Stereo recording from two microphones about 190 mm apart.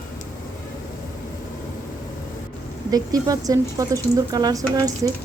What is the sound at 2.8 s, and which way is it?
Speech, 20° right (ahead or behind).